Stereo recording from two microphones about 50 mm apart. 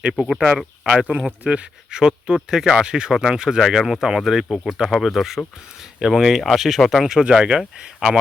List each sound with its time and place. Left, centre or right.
0.2 s speech: centre
7.1 s speech: centre